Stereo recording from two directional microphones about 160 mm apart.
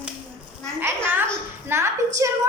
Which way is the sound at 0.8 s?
15° right (ahead or behind).